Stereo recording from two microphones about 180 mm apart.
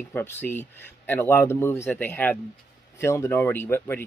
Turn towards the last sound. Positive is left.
turn(degrees=10)  # may be behind; listen again after turning